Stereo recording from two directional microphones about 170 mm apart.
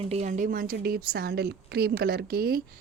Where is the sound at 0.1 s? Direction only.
45° right (ahead or behind).